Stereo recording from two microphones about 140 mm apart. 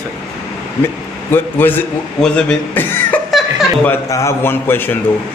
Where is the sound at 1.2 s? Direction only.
15° left (ahead or behind).